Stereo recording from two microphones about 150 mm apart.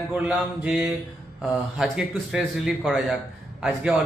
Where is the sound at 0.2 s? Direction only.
5° right (ahead or behind).